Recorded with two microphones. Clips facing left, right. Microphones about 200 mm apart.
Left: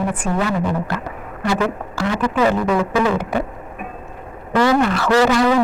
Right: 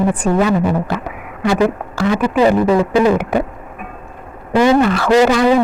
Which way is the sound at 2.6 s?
25° right (ahead or behind).